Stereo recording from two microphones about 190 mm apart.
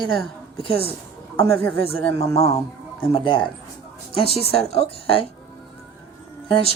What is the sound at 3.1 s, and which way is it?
A woman's voice, 25° left (ahead or behind).